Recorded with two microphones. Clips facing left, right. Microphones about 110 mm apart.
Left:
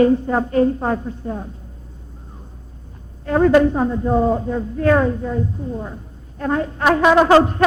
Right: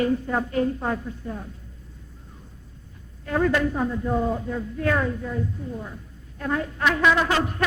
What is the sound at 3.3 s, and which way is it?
A woman's voice, 40° left (ahead or behind).